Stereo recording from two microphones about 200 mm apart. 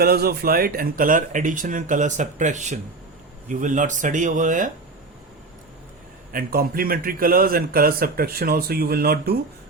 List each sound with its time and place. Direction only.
0.0 s speech: 50° right (ahead or behind)
6.3 s a man's voice: 45° right (ahead or behind)